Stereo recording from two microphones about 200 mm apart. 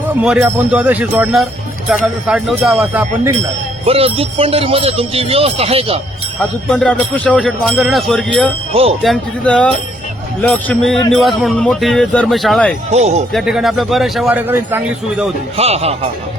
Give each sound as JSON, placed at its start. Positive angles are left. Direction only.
{"t": 0.0, "sound": "speech", "side_deg": -5}
{"t": 3.8, "sound": "speech", "side_deg": -30}
{"t": 6.4, "sound": "speech", "side_deg": 5}
{"t": 8.7, "sound": "speech", "side_deg": -30}
{"t": 9.0, "sound": "speech", "side_deg": 5}
{"t": 12.9, "sound": "speech", "side_deg": -35}
{"t": 13.3, "sound": "speech", "side_deg": 0}
{"t": 15.5, "sound": "speech", "side_deg": -30}